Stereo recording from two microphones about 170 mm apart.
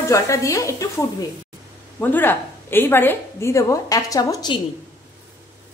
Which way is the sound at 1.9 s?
10° left (ahead or behind).